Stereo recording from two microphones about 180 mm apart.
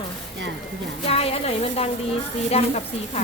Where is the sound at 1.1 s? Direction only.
35° left (ahead or behind).